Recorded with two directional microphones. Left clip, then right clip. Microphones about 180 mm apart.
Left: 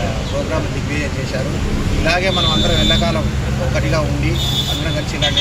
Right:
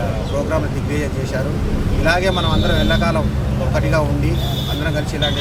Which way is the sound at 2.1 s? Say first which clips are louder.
Left 1 dB; 15° right (ahead or behind).